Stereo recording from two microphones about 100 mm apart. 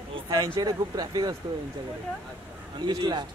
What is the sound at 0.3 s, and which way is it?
Speech, 35° right (ahead or behind).